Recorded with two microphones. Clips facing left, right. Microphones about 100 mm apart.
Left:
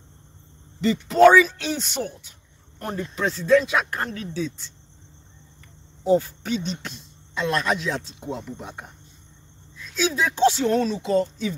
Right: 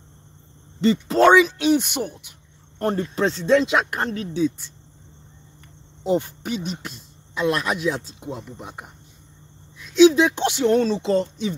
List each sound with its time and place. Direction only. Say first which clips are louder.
1.0 s speech: left 2 dB; 30° right (ahead or behind)
2.8 s speech: right 5 dB; 35° right (ahead or behind); by 4.7 s 10° right (ahead or behind)
6.0 s speech: left 2 dB; 20° right (ahead or behind)
6.6 s speech: even; 10° right (ahead or behind)
9.8 s speech: right 11 dB; 20° right (ahead or behind)
10.7 s speech: right 3 dB; 30° right (ahead or behind)